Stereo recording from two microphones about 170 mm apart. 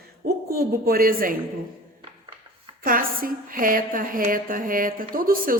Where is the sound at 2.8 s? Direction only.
55° right (ahead or behind).